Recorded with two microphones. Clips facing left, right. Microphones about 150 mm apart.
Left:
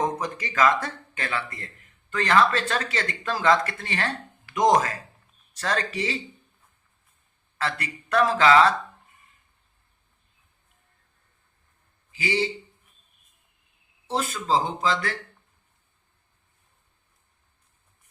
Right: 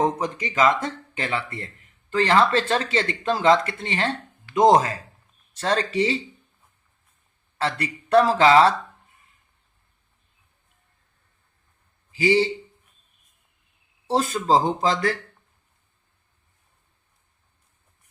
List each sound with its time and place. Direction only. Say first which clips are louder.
0.0 s speech: right 4 dB; 25° right (ahead or behind)
7.6 s speech: right 4 dB; 30° right (ahead or behind)
12.1 s speech: right 7 dB; 35° right (ahead or behind)
14.1 s speech: right 5 dB; 40° right (ahead or behind)